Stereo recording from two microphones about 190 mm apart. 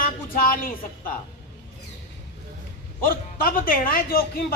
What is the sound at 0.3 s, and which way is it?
Speech, 50° left (ahead or behind).